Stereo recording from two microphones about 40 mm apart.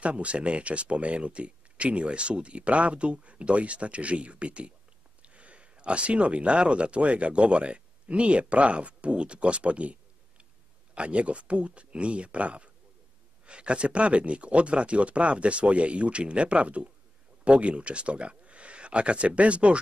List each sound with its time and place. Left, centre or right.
0.0 s speech: right